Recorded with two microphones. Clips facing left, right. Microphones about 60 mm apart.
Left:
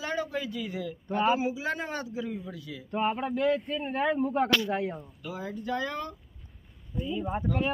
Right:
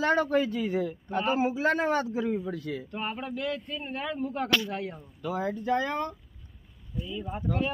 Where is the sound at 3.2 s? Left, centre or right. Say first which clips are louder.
Left 6 dB; left.